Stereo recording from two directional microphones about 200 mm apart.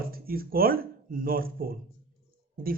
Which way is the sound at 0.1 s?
45° right (ahead or behind).